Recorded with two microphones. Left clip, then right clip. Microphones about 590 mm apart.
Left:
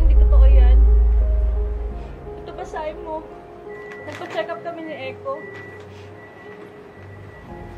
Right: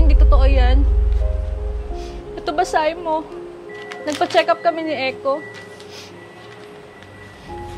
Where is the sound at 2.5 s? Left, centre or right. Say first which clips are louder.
Right 12 dB; right.